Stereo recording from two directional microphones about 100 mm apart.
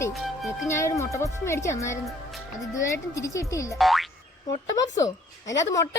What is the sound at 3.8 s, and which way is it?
Speech, centre (ahead or behind).